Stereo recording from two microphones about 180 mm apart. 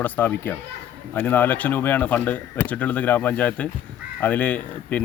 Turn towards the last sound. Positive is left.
turn(degrees=10)  # may be behind; listen again after turning